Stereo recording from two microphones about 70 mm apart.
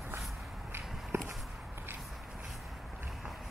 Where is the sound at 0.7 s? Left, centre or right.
Right.